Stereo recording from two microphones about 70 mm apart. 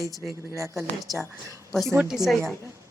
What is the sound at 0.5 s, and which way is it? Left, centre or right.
Speech, right.